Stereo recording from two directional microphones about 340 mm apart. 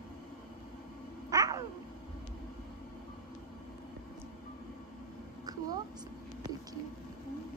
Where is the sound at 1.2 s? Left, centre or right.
Centre.